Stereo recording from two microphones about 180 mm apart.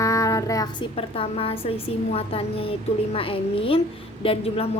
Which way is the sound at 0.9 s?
30° left (ahead or behind).